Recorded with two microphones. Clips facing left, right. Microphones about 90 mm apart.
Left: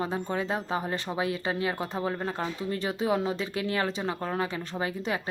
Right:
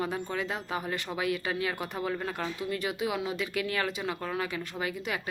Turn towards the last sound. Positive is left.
turn(degrees=30)  # may be behind; listen again after turning